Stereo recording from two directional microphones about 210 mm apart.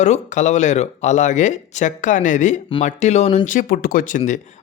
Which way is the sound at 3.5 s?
40° left (ahead or behind).